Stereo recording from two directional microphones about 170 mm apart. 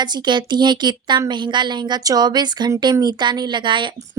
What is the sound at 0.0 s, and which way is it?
A woman's voice, 25° right (ahead or behind).